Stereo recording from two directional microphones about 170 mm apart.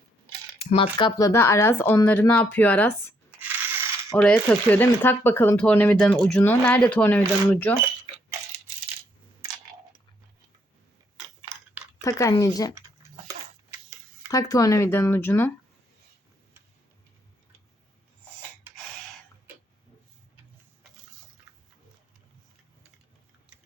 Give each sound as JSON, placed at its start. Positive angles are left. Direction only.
{"t": 0.6, "sound": "speech", "side_deg": 35}
{"t": 1.3, "sound": "speech", "side_deg": 15}
{"t": 4.2, "sound": "speech", "side_deg": 5}
{"t": 12.0, "sound": "speech", "side_deg": 20}
{"t": 12.7, "sound": "a sound", "side_deg": -15}
{"t": 14.3, "sound": "speech", "side_deg": 20}